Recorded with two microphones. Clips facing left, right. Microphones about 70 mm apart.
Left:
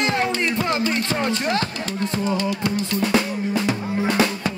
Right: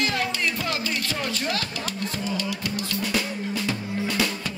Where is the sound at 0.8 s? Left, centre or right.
Left.